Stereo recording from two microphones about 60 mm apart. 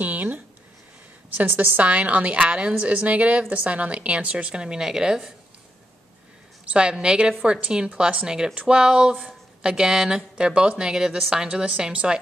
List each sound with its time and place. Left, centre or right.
0.0 s a sound: right
1.8 s a woman's voice: right
6.6 s speech: centre